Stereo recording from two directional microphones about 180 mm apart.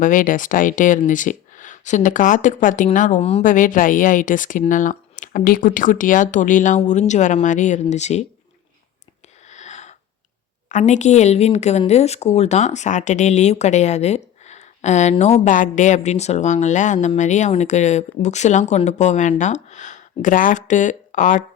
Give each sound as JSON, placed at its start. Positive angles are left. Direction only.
{"t": 0.0, "sound": "speech", "side_deg": 45}
{"t": 9.5, "sound": "a sound", "side_deg": 40}
{"t": 10.7, "sound": "speech", "side_deg": 40}